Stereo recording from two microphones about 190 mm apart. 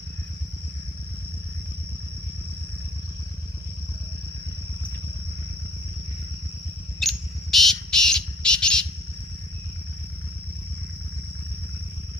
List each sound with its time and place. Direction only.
7.0 s bird: centre (ahead or behind)